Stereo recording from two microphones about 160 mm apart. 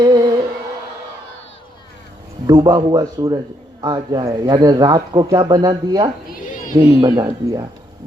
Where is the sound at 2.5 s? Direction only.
25° right (ahead or behind).